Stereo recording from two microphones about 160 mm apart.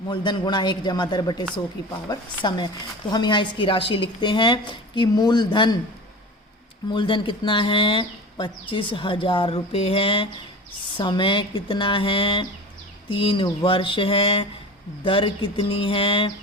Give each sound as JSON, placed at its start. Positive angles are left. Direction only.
{"t": 0.1, "sound": "speech", "side_deg": 30}
{"t": 6.9, "sound": "speech", "side_deg": 30}